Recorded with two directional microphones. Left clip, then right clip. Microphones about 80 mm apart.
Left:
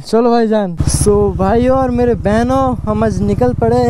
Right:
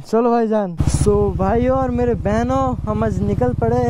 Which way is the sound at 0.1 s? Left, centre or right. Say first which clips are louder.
Left 4 dB; centre.